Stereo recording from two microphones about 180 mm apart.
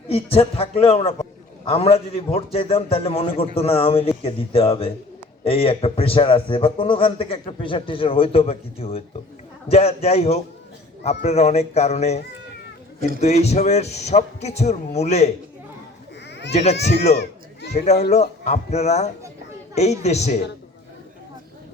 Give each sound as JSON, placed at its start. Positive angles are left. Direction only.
{"t": 0.1, "sound": "a man's voice", "side_deg": 35}
{"t": 16.5, "sound": "a man's voice", "side_deg": 35}
{"t": 17.2, "sound": "children playing", "side_deg": 70}
{"t": 18.1, "sound": "a man's voice", "side_deg": 40}